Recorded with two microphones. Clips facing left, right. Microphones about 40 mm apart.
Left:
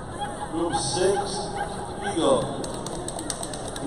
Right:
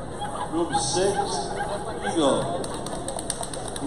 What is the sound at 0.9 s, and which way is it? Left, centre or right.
A man's voice, centre.